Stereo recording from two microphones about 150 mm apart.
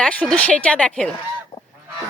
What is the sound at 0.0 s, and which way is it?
Speech, 5° left (ahead or behind).